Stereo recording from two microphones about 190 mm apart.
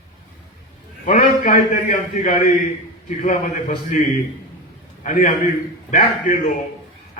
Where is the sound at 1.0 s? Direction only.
45° left (ahead or behind).